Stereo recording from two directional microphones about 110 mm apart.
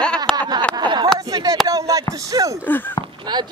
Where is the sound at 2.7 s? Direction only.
15° left (ahead or behind).